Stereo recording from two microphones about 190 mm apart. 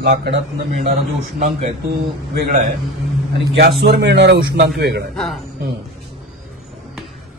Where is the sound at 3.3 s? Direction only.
60° right (ahead or behind).